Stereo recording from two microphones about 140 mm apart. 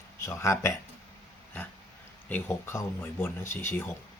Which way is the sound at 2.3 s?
15° left (ahead or behind).